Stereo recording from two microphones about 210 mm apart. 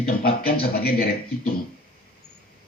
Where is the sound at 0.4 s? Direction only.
45° left (ahead or behind).